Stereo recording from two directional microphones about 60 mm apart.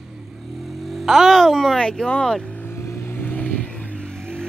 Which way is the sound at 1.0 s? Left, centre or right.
Centre.